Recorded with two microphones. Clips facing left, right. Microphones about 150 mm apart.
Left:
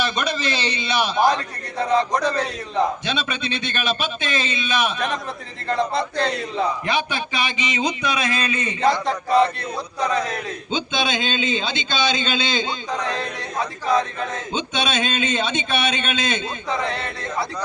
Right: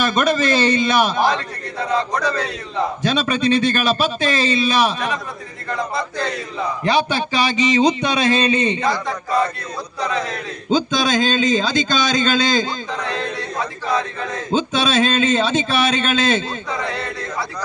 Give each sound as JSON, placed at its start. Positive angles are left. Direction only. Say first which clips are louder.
{"t": 0.0, "sound": "a man's voice", "louder": "right 6 dB", "side_deg": -45}
{"t": 2.0, "sound": "a man's voice", "louder": "even", "side_deg": 20}
{"t": 3.0, "sound": "a man's voice", "louder": "right 8 dB", "side_deg": -40}
{"t": 6.8, "sound": "a man's voice", "louder": "right 5 dB", "side_deg": -35}
{"t": 8.8, "sound": "a man's voice", "louder": "left 2 dB", "side_deg": 25}
{"t": 10.7, "sound": "a man's voice", "louder": "right 7 dB", "side_deg": -40}
{"t": 12.9, "sound": "speech", "louder": "even", "side_deg": 15}
{"t": 14.5, "sound": "a man's voice", "louder": "right 8 dB", "side_deg": -35}
{"t": 16.6, "sound": "a man's voice", "louder": "even", "side_deg": 25}